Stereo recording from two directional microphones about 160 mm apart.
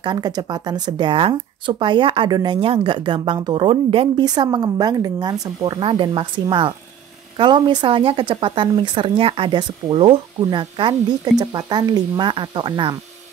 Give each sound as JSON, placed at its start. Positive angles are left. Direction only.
{"t": 0.0, "sound": "speech", "side_deg": -25}